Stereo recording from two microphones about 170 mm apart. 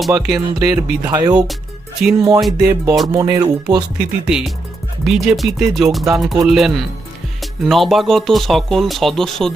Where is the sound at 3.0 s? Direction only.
20° right (ahead or behind).